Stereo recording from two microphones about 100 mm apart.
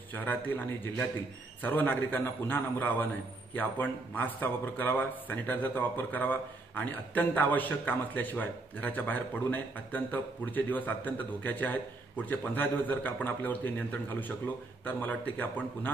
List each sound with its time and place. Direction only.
0.1 s a man's voice: 20° left (ahead or behind)